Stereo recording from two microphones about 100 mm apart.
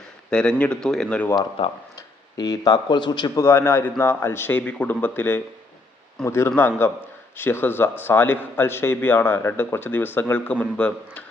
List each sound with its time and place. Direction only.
0.3 s speech: 10° left (ahead or behind)
1.6 s speech: 65° left (ahead or behind)
2.0 s speech: 35° left (ahead or behind)
3.3 s a man's voice: 25° left (ahead or behind)